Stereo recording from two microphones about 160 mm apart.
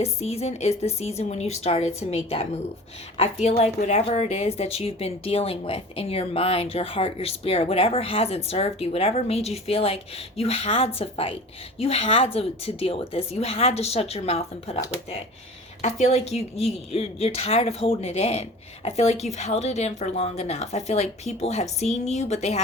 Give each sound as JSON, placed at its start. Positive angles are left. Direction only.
{"t": 0.0, "sound": "a woman's voice", "side_deg": 40}
{"t": 15.8, "sound": "a woman's voice", "side_deg": 45}